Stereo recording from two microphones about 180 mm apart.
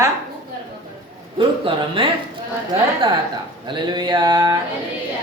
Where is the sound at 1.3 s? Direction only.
30° right (ahead or behind).